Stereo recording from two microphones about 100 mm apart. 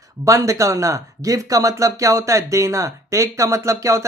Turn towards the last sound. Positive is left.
turn(degrees=-30)  # may be behind; listen again after turning